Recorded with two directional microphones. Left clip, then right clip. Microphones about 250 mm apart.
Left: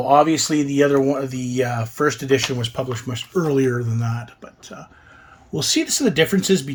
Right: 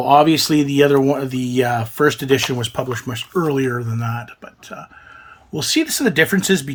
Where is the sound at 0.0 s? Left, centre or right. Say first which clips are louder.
Right 3 dB; right; by 4.3 s centre.